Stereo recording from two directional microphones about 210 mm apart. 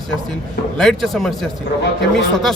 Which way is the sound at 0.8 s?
Centre (ahead or behind).